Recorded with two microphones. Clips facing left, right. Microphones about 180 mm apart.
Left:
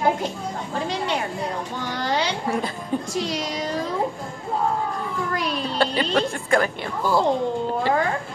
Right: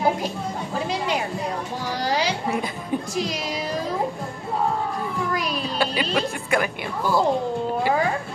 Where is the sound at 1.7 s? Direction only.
35° right (ahead or behind).